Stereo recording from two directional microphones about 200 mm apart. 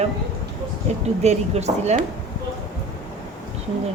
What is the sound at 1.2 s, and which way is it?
Speech, 35° right (ahead or behind).